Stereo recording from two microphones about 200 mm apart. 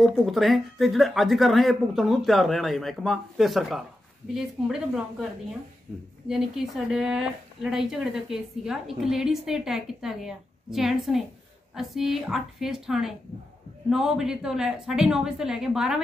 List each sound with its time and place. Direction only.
0.1 s speech: centre (ahead or behind)
6.2 s speech: 5° right (ahead or behind)